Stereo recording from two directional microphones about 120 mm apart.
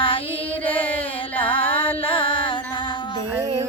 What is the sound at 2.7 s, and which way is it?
Music, 40° left (ahead or behind).